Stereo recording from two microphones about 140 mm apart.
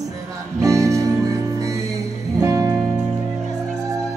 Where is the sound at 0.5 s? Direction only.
20° right (ahead or behind).